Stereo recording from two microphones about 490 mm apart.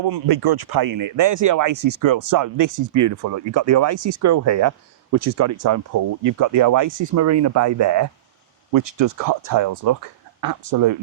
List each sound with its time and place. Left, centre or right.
0.0 s speech: right